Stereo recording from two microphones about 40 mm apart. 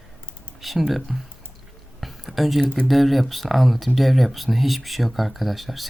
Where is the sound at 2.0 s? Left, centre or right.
Centre.